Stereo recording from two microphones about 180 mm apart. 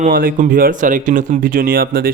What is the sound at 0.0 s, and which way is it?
Speech, 50° right (ahead or behind).